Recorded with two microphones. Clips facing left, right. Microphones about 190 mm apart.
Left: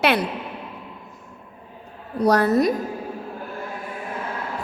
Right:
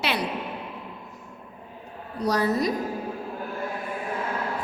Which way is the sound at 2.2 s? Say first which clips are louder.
Left 6 dB; 55° left (ahead or behind).